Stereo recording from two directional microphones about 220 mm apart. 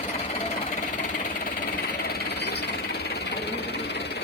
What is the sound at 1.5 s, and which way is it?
Engine, 40° left (ahead or behind).